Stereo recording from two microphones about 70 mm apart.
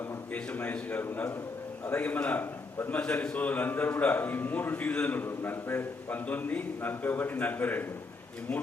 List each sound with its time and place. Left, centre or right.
0.3 s a man's voice: left
3.0 s a man's voice: centre